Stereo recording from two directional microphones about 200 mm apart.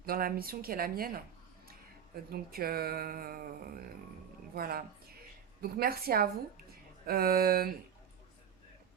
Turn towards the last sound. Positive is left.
turn(degrees=-50)  # may be behind; listen again after turning